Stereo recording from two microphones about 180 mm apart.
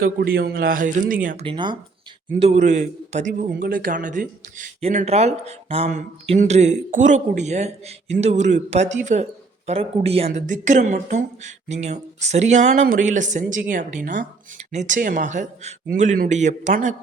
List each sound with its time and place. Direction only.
0.0 s speech: 55° right (ahead or behind)
1.5 s speech: 25° right (ahead or behind)
2.4 s a man's voice: 40° right (ahead or behind)